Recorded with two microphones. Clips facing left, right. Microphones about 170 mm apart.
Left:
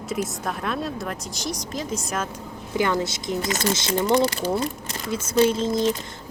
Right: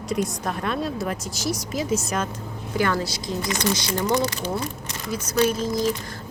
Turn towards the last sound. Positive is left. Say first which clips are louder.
# left 2 dB
turn(degrees=25)  # may be behind; listen again after turning